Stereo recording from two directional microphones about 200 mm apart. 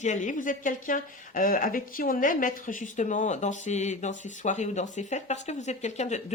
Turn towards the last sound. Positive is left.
turn(degrees=35)  # may be behind; listen again after turning